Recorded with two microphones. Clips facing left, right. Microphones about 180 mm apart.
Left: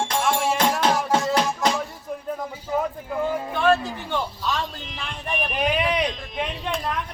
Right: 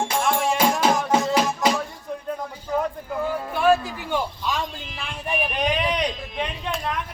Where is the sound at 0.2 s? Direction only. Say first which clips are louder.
Right 1 dB; centre (ahead or behind).